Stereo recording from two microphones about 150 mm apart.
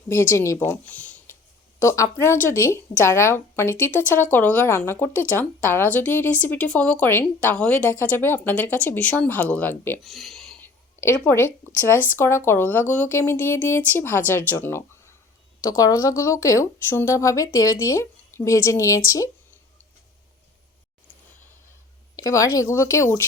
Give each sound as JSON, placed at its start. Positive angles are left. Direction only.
{"t": 0.1, "sound": "speech", "side_deg": 20}
{"t": 0.7, "sound": "a sound", "side_deg": 10}
{"t": 1.8, "sound": "speech", "side_deg": 20}
{"t": 10.0, "sound": "speech", "side_deg": 0}
{"t": 10.6, "sound": "a sound", "side_deg": 15}
{"t": 12.1, "sound": "speech", "side_deg": 15}
{"t": 22.1, "sound": "speech", "side_deg": 20}